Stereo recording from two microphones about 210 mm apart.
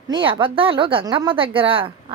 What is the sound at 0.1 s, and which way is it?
Speech, 25° right (ahead or behind).